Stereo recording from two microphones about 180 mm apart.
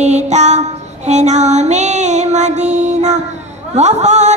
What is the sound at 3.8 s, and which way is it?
Speech, 40° right (ahead or behind).